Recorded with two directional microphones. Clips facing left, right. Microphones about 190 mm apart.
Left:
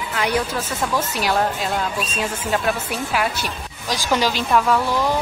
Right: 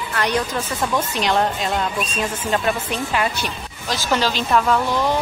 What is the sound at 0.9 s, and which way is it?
A woman's voice, 5° left (ahead or behind).